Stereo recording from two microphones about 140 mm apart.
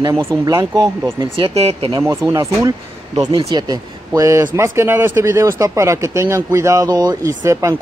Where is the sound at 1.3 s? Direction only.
45° right (ahead or behind).